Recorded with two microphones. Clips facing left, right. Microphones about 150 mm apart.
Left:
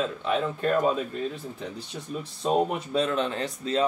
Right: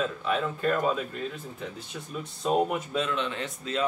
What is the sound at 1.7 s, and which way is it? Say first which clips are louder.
Speech: left 3 dB; 35° left (ahead or behind).